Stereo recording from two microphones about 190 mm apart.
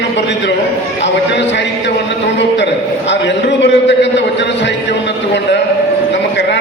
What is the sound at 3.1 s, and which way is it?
A man's voice, 65° left (ahead or behind).